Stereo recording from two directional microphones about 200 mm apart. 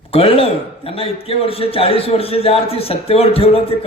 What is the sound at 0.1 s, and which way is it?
A man's voice, 30° left (ahead or behind).